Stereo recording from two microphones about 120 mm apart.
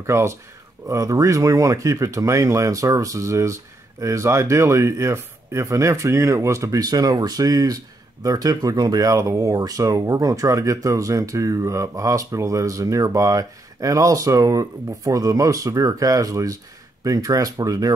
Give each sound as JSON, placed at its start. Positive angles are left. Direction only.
{"t": 0.0, "sound": "speech", "side_deg": -25}